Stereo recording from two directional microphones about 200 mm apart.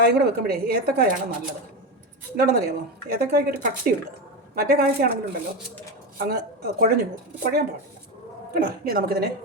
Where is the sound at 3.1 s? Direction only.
50° right (ahead or behind).